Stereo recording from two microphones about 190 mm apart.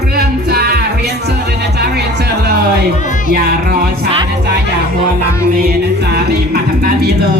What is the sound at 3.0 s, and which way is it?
Music, 40° left (ahead or behind).